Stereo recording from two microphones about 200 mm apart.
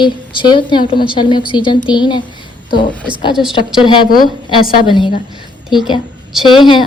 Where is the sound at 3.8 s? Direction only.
25° left (ahead or behind).